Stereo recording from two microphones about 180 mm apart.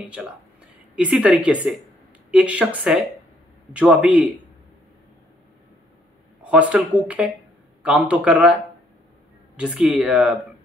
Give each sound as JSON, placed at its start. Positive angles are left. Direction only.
{"t": 0.0, "sound": "a woman's voice", "side_deg": -5}
{"t": 6.4, "sound": "a man's voice", "side_deg": -5}
{"t": 9.6, "sound": "a woman's voice", "side_deg": -5}